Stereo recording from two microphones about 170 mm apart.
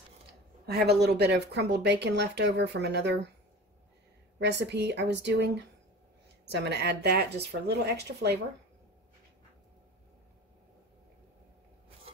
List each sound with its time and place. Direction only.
0.7 s speech: 75° right (ahead or behind)
4.4 s speech: 90° right